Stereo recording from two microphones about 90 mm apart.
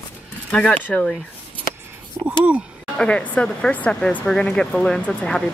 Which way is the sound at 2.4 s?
15° right (ahead or behind).